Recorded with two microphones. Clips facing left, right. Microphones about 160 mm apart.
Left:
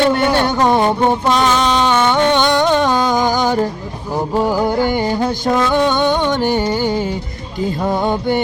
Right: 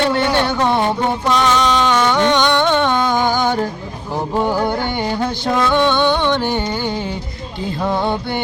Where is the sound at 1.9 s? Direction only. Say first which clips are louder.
Left 1 dB; 25° left (ahead or behind).